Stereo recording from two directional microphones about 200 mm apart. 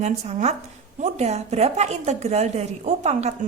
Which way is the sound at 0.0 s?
35° right (ahead or behind).